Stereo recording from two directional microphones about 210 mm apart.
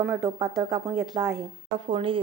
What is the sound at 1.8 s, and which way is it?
Speech, 25° right (ahead or behind).